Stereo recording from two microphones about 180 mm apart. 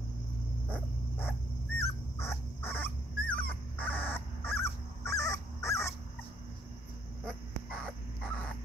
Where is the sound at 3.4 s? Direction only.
10° left (ahead or behind).